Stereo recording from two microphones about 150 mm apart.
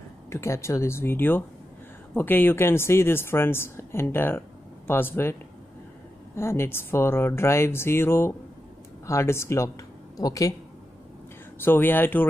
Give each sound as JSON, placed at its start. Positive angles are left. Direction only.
{"t": 0.3, "sound": "speech", "side_deg": 20}
{"t": 6.3, "sound": "speech", "side_deg": 15}
{"t": 11.6, "sound": "speech", "side_deg": 15}